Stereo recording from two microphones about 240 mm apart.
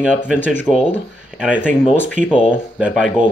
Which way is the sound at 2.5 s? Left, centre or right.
Centre.